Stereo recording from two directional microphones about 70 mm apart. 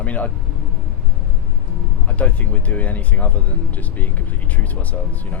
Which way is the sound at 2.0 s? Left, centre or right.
Left.